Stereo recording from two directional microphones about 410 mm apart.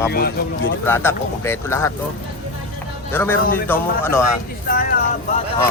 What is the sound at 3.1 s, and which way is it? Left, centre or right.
Speech, centre.